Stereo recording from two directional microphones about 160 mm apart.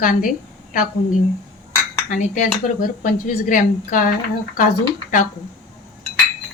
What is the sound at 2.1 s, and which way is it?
Speech, 55° left (ahead or behind).